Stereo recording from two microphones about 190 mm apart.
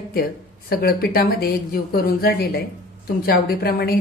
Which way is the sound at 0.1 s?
55° left (ahead or behind).